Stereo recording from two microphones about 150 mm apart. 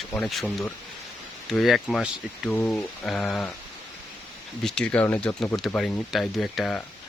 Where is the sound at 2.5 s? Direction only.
15° left (ahead or behind).